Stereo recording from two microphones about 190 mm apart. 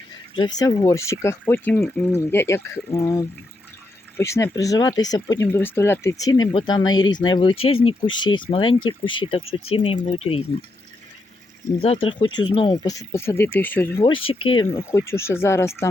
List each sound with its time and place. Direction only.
0.3 s speech: 20° left (ahead or behind)
11.8 s speech: 30° left (ahead or behind); by 14.0 s 10° left (ahead or behind)
14.0 s speech: 25° left (ahead or behind)